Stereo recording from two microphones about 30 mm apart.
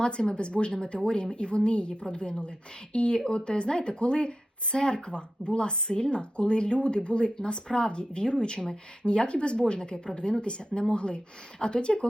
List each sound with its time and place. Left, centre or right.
0.0 s speech: left